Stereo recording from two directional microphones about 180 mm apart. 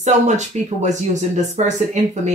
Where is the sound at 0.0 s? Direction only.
40° right (ahead or behind).